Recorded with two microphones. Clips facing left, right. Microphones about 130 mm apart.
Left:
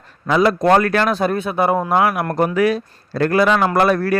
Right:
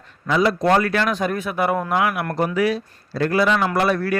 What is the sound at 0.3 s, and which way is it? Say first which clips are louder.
Speech: left 3 dB; 55° left (ahead or behind).